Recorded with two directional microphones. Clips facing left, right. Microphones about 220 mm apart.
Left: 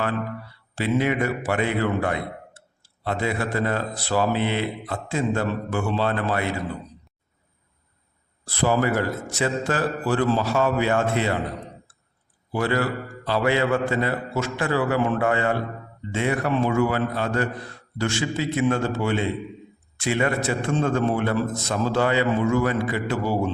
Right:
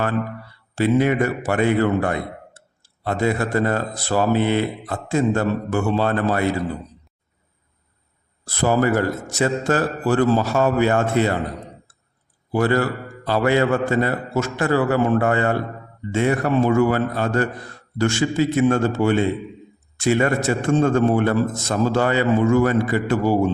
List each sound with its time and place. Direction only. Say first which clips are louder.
0.8 s a man's voice: right 5 dB; 45° right (ahead or behind)
8.4 s a man's voice: right 3 dB; 45° right (ahead or behind)
12.5 s a man's voice: right 4 dB; 45° right (ahead or behind)